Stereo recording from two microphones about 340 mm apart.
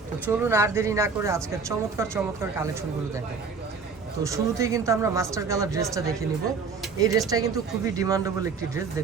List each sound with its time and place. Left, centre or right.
0.3 s speech: centre
4.3 s speech: centre